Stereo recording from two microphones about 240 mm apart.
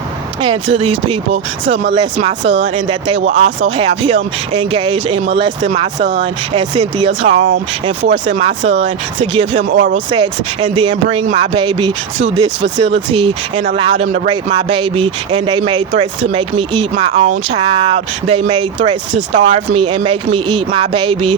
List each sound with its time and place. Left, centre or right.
0.4 s speech: right